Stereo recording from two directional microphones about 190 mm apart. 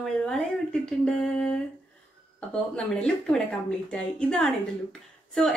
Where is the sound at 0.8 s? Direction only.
5° left (ahead or behind).